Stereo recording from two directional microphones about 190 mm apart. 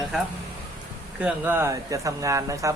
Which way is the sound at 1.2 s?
10° right (ahead or behind).